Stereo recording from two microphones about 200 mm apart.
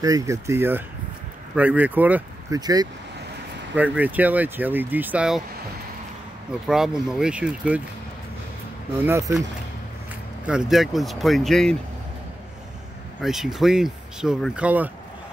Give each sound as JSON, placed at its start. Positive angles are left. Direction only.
{"t": 0.0, "sound": "speech", "side_deg": -15}
{"t": 2.6, "sound": "speech", "side_deg": -20}
{"t": 3.7, "sound": "speech", "side_deg": -10}
{"t": 6.7, "sound": "speech", "side_deg": -5}
{"t": 9.0, "sound": "speech", "side_deg": -15}
{"t": 10.4, "sound": "speech", "side_deg": -5}
{"t": 13.2, "sound": "speech", "side_deg": 0}